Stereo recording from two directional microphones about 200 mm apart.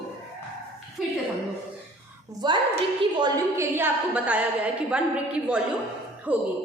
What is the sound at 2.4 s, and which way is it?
A woman's voice, 20° right (ahead or behind).